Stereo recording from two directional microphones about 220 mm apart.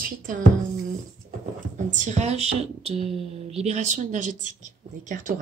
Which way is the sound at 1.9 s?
35° right (ahead or behind).